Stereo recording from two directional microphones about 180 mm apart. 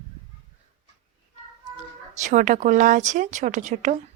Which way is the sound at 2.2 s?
45° right (ahead or behind).